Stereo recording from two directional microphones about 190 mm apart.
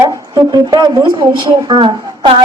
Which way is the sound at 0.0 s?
20° right (ahead or behind).